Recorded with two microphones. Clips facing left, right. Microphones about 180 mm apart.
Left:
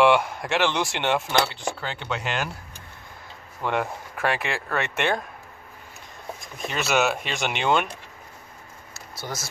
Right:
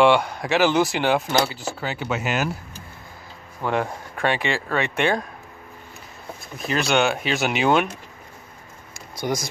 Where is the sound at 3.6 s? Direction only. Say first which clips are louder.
Right 2 dB; centre (ahead or behind).